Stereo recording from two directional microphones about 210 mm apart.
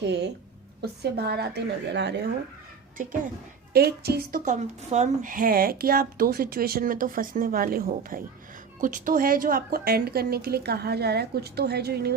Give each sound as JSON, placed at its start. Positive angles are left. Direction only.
{"t": 0.0, "sound": "a woman's voice", "side_deg": -55}
{"t": 3.7, "sound": "a woman's voice", "side_deg": -50}